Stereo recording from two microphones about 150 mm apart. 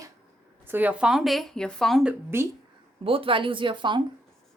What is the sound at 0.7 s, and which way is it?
Speech, 10° right (ahead or behind).